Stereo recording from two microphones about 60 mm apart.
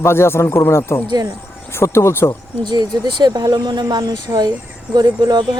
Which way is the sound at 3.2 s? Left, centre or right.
Right.